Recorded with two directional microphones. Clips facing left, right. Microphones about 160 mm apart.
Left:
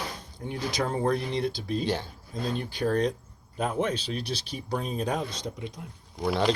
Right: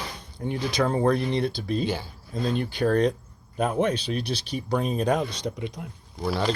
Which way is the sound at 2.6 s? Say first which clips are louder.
Right 4 dB; 70° right (ahead or behind).